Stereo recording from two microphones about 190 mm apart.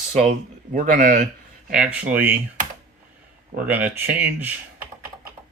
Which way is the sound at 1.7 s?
5° right (ahead or behind).